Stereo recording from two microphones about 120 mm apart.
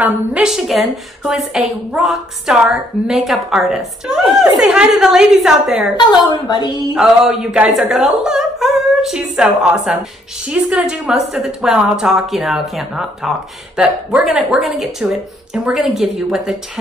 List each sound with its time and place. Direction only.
0.0 s a woman's voice: 5° right (ahead or behind)
5.9 s a woman's voice: 35° left (ahead or behind)
7.0 s a woman's voice: 5° right (ahead or behind)